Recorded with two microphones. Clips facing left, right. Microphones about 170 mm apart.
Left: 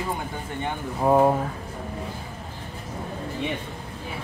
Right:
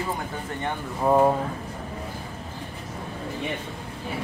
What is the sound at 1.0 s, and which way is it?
Speech, 10° left (ahead or behind).